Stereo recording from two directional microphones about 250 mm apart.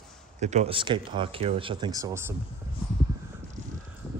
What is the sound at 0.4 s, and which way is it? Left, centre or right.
Speech, right.